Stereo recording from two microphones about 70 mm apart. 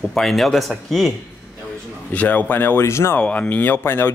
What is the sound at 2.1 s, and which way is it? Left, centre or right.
Speech, left.